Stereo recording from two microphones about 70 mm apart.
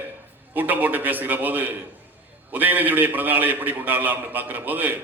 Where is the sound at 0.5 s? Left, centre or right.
Right.